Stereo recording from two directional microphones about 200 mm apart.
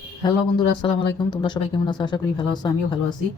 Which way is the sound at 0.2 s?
20° left (ahead or behind).